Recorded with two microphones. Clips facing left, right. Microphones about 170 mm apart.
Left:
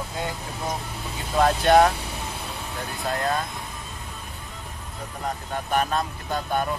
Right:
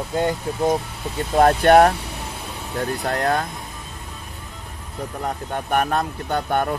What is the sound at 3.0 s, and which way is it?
Speech, 70° right (ahead or behind).